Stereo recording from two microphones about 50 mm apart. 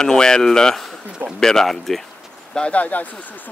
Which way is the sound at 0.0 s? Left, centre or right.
Centre.